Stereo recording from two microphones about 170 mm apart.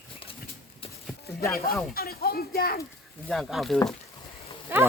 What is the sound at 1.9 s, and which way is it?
Speech, 65° left (ahead or behind).